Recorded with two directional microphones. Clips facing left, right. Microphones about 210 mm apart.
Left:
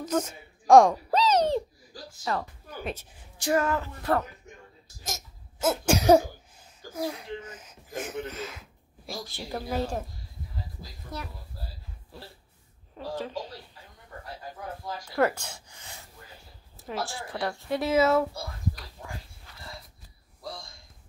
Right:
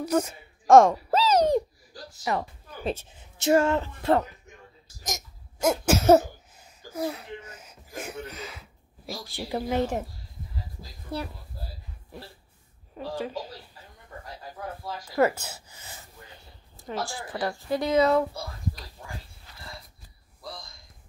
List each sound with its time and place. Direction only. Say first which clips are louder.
0.0 s a sound: right 3 dB; 10° right (ahead or behind)
2.3 s a woman's voice: right 2 dB; 15° right (ahead or behind)
2.8 s a woman's voice: right 5 dB; 25° right (ahead or behind)
5.0 s cough: right 3 dB; 15° right (ahead or behind)
5.9 s throat clearing: right 1 dB; 5° right (ahead or behind)
8.3 s speech: left 3 dB; 5° left (ahead or behind)
8.5 s speech: even; 10° right (ahead or behind)
11.1 s speech: right 6 dB; 30° right (ahead or behind)
12.9 s speech: right 2 dB; 10° right (ahead or behind)
15.0 s speech: right 2 dB; 5° right (ahead or behind)